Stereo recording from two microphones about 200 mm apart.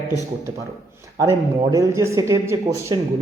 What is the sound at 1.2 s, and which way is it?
Speech, 15° right (ahead or behind).